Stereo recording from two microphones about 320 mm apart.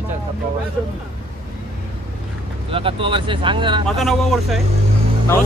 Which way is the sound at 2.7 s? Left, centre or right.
Centre.